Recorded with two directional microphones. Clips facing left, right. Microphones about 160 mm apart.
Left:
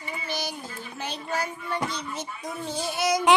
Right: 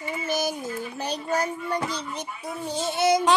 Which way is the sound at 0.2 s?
45° right (ahead or behind).